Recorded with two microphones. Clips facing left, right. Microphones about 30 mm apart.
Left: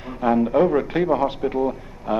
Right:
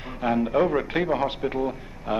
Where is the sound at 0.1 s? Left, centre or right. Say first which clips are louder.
Left 4 dB; centre.